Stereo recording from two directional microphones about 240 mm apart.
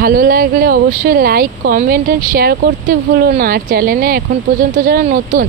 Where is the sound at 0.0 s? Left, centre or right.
Right.